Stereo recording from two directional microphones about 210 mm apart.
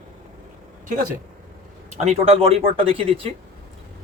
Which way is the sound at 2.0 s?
30° right (ahead or behind).